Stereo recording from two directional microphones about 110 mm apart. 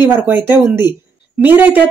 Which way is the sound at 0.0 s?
20° right (ahead or behind).